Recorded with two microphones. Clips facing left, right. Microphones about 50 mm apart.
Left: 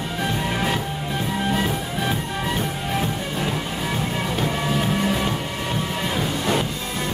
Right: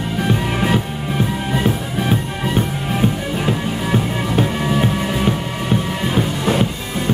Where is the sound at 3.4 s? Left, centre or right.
Right.